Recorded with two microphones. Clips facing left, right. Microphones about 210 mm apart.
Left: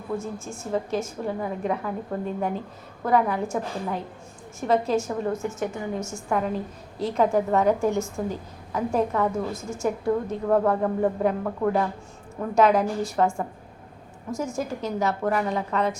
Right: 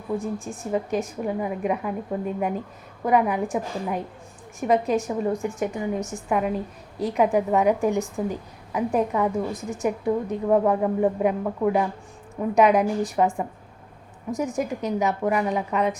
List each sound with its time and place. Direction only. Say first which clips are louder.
0.2 s a woman's voice: right 3 dB; 15° right (ahead or behind)